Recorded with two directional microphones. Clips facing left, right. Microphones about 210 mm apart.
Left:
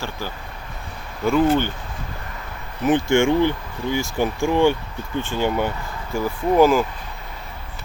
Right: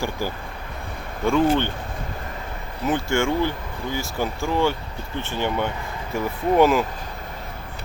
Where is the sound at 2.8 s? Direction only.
15° left (ahead or behind); by 6.8 s centre (ahead or behind).